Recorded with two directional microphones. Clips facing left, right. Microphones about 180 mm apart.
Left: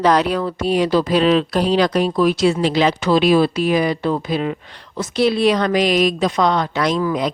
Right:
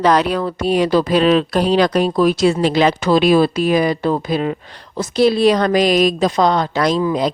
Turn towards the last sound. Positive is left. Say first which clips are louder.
# right 2 dB
turn(degrees=-30)  # may be behind; listen again after turning